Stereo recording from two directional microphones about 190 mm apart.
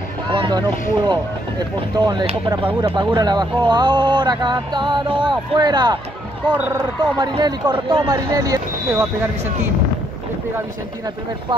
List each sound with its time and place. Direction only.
0.3 s speech: 25° right (ahead or behind)
6.5 s speech: 10° right (ahead or behind)
7.2 s speech: 25° right (ahead or behind)